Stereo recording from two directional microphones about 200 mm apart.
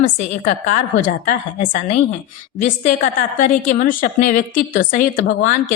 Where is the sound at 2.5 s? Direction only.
35° left (ahead or behind).